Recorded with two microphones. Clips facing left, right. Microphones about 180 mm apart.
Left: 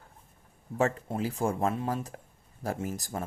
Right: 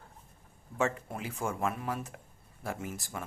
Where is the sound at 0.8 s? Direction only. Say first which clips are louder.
Left 4 dB; 35° left (ahead or behind).